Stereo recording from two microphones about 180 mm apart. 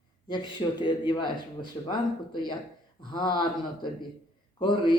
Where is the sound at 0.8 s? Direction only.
25° left (ahead or behind).